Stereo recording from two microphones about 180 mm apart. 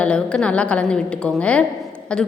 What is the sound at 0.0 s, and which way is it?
A woman's voice, 5° left (ahead or behind).